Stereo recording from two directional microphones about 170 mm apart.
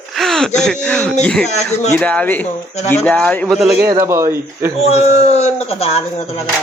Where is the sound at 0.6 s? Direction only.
5° left (ahead or behind).